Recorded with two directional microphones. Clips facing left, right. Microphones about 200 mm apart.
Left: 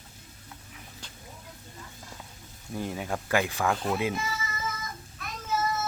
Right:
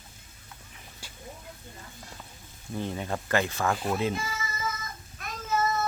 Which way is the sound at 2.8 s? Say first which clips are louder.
Even; 5° left (ahead or behind).